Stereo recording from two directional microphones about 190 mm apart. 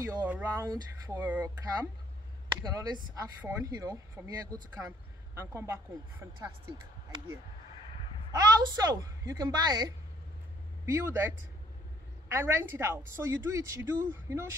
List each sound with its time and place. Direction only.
0.0 s a woman's voice: 10° right (ahead or behind)
2.6 s a woman's voice: 20° right (ahead or behind)
8.3 s a woman's voice: 20° right (ahead or behind)